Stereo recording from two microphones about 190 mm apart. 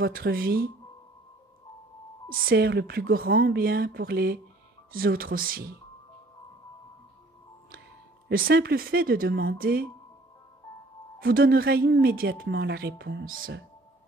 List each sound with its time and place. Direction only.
0.0 s speech: 55° right (ahead or behind)
2.3 s speech: 55° right (ahead or behind)
8.3 s speech: 50° right (ahead or behind)
11.1 s speech: 50° right (ahead or behind)